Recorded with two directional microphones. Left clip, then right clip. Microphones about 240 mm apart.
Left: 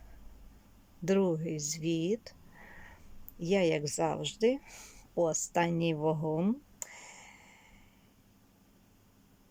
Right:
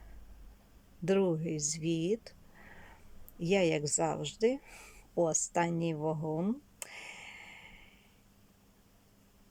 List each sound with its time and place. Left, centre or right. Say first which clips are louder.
1.0 s speech: even; centre